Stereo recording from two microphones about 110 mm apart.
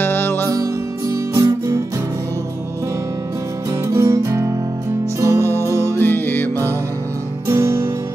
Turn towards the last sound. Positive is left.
turn(degrees=-25)  # may be behind; listen again after turning